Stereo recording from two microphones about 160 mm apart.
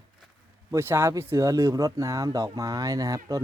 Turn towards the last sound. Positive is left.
turn(degrees=-20)  # may be behind; listen again after turning